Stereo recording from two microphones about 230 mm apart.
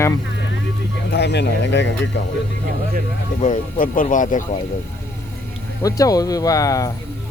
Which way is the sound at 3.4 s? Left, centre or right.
Left.